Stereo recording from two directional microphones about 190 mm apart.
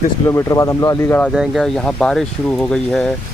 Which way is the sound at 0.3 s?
15° left (ahead or behind).